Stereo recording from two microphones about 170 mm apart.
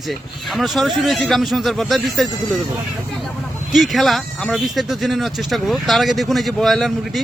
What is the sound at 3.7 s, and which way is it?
Speech, centre (ahead or behind).